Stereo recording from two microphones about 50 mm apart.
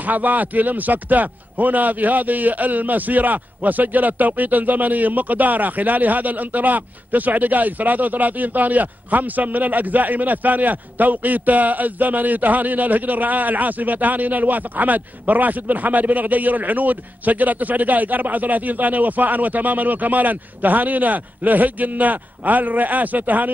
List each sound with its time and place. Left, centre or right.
0.0 s a man's voice: right